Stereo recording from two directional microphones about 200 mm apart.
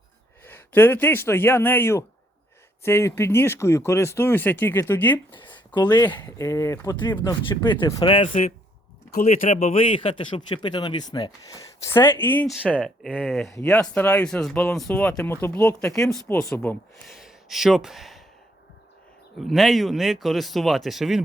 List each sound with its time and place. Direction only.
0.4 s speech: 10° left (ahead or behind)
5.3 s a man's voice: 20° left (ahead or behind)
8.3 s a man's voice: 40° left (ahead or behind); by 16.2 s centre (ahead or behind)
16.3 s speech: 10° left (ahead or behind)
17.2 s a sound: centre (ahead or behind)
19.4 s speech: centre (ahead or behind)